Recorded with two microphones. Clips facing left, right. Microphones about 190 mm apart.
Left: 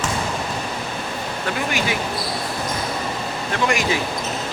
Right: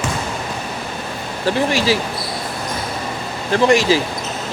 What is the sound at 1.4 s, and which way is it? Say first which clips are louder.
Speech: right 8 dB; 30° right (ahead or behind).